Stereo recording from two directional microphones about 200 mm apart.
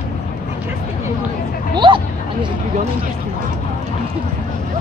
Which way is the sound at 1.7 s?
25° right (ahead or behind).